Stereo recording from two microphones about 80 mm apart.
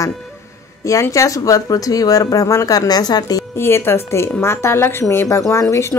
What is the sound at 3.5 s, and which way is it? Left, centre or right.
A woman's voice, left.